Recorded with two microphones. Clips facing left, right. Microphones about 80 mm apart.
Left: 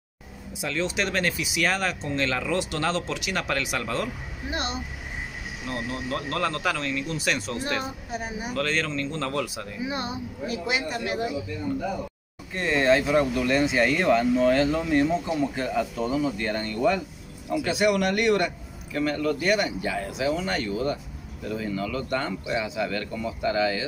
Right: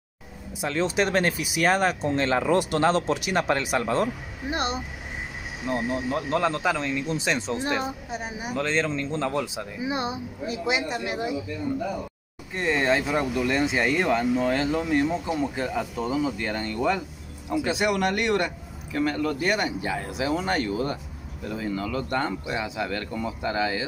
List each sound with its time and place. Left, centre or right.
0.6 s speech: right
5.7 s speech: centre
7.1 s speech: right
12.5 s speech: centre
17.6 s speech: right